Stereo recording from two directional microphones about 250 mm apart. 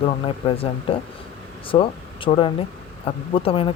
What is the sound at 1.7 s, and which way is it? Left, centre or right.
Speech, left.